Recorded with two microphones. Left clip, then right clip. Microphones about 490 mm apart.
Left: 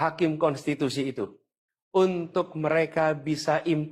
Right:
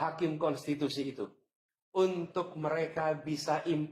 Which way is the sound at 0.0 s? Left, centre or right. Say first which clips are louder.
Left 8 dB; left.